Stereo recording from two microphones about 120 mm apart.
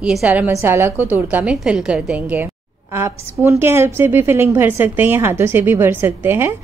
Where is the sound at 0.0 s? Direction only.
10° right (ahead or behind).